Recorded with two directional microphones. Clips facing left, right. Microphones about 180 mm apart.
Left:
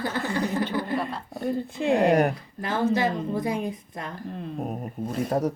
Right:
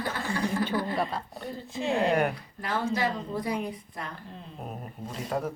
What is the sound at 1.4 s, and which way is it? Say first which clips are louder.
Speech: left 7 dB; 50° left (ahead or behind).